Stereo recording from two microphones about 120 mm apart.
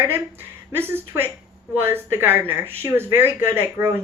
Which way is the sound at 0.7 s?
20° right (ahead or behind).